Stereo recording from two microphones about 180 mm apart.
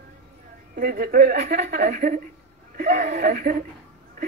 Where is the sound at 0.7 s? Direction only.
55° right (ahead or behind).